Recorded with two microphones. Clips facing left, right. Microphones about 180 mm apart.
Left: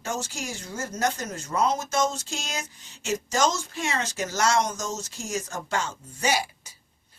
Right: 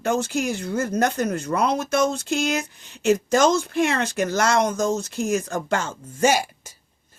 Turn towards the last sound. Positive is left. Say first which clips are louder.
# right 7 dB
turn(degrees=-45)  # may be behind; listen again after turning